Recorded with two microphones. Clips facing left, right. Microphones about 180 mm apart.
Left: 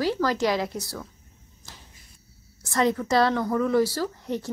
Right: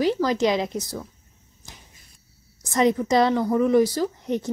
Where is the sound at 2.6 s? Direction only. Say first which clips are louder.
Right 3 dB; 20° right (ahead or behind).